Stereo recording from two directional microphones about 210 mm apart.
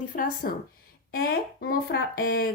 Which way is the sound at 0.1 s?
40° left (ahead or behind).